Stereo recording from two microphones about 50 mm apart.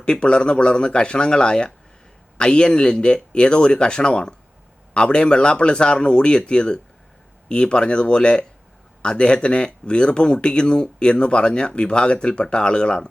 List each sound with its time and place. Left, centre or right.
0.0 s speech: centre